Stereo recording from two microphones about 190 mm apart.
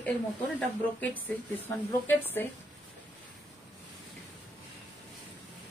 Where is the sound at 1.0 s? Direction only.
10° left (ahead or behind).